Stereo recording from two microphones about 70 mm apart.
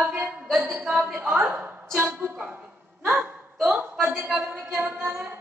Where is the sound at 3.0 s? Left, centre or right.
Right.